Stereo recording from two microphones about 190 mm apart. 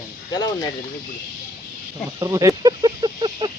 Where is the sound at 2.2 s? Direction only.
20° right (ahead or behind).